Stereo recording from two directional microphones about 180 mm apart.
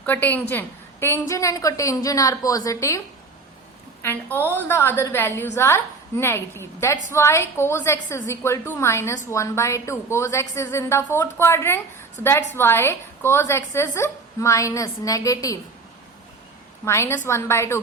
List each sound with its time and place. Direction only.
0.0 s a woman's voice: 10° left (ahead or behind)
4.0 s a woman's voice: 10° left (ahead or behind)
16.8 s a woman's voice: 15° left (ahead or behind)